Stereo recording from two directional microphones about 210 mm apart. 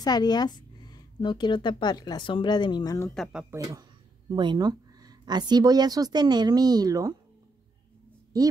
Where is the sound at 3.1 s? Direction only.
Centre (ahead or behind).